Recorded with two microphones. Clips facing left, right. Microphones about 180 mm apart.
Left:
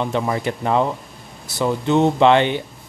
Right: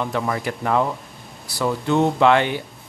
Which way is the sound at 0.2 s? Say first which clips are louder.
Left 2 dB; 20° left (ahead or behind).